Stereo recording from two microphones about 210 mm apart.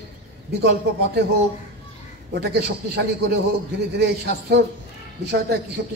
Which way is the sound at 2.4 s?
50° right (ahead or behind).